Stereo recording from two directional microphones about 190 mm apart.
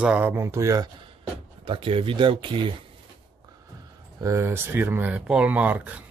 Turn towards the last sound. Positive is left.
turn(degrees=-10)  # may be behind; listen again after turning